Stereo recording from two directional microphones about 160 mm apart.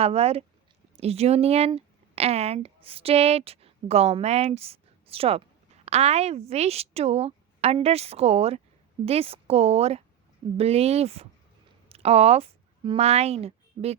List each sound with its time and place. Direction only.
0.0 s a woman's voice: 40° right (ahead or behind)